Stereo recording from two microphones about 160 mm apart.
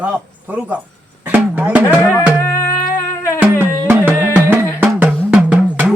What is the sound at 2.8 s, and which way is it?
Music, 20° left (ahead or behind).